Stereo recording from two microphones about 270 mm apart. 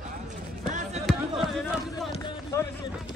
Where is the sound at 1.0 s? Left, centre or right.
Centre.